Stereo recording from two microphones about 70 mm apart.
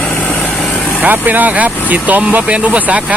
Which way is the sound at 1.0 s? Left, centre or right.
Right.